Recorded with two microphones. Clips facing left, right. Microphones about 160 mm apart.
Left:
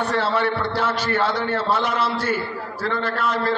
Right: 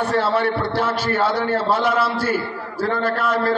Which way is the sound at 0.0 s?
10° right (ahead or behind).